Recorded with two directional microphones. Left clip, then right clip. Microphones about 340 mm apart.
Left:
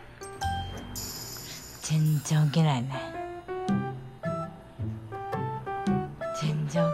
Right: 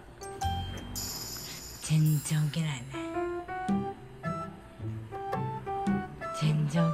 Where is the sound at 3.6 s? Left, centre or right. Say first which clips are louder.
Left 1 dB; centre.